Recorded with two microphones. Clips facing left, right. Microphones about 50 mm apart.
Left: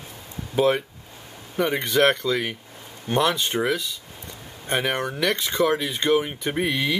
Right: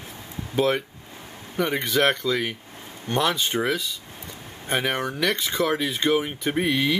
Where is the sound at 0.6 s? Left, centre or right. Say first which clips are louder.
Left 2 dB; centre.